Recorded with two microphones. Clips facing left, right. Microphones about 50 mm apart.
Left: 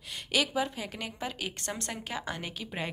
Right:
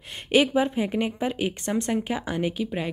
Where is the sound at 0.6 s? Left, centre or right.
Right.